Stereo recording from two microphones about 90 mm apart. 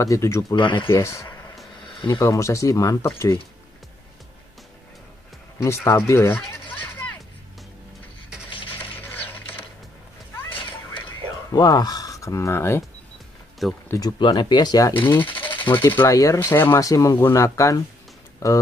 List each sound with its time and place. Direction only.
0.0 s speech: 35° left (ahead or behind)
0.6 s speech: 60° left (ahead or behind)
0.8 s speech: 35° left (ahead or behind)
5.6 s speech: 30° left (ahead or behind)
8.5 s rub: 80° left
9.0 s mechanisms: 20° left (ahead or behind)
10.3 s a sound: 25° left (ahead or behind)
11.5 s speech: 45° left (ahead or behind); by 12.8 s 30° left (ahead or behind)
13.6 s speech: centre (ahead or behind)
14.2 s speech: 55° left (ahead or behind)
15.0 s speech: 25° left (ahead or behind)
16.1 s speech: 35° left (ahead or behind)
16.8 s speech: 40° left (ahead or behind)